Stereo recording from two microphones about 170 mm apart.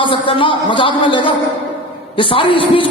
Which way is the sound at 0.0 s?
30° left (ahead or behind).